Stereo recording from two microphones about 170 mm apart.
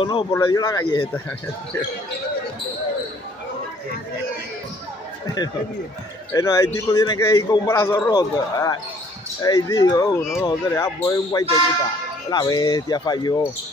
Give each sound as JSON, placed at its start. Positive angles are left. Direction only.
{"t": 0.0, "sound": "speech", "side_deg": 30}
{"t": 6.3, "sound": "a man's voice", "side_deg": 20}